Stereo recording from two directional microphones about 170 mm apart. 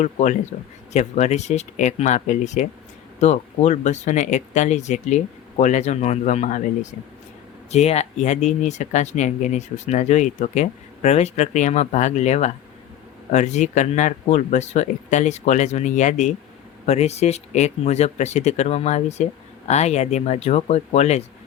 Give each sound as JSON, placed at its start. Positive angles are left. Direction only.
{"t": 0.0, "sound": "speech", "side_deg": 45}
{"t": 7.7, "sound": "speech", "side_deg": 40}